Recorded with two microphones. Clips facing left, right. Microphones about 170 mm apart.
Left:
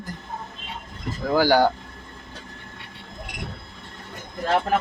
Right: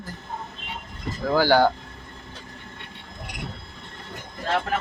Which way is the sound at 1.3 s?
15° left (ahead or behind).